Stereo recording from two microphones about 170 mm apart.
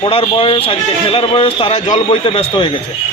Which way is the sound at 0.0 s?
30° left (ahead or behind).